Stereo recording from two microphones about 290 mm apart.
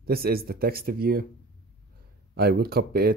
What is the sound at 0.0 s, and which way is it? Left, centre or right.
Speech, right.